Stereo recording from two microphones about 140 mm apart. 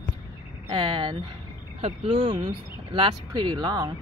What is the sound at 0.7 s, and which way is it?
Speech, 35° right (ahead or behind).